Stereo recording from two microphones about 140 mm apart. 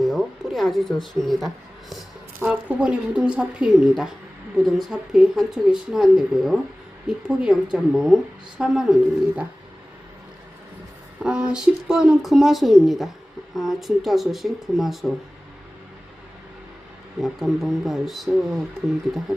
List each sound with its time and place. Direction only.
0.0 s a sound: centre (ahead or behind)
2.4 s a woman's voice: 10° right (ahead or behind)
11.2 s a woman's voice: 5° right (ahead or behind)
17.2 s a woman's voice: centre (ahead or behind)